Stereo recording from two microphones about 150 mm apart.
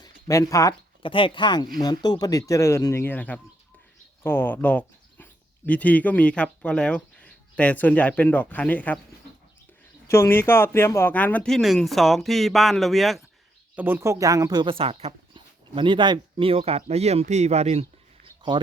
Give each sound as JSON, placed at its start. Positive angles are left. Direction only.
{"t": 0.0, "sound": "a sound", "side_deg": 20}
{"t": 1.0, "sound": "speech", "side_deg": 35}
{"t": 10.1, "sound": "speech", "side_deg": 15}
{"t": 13.7, "sound": "speech", "side_deg": -15}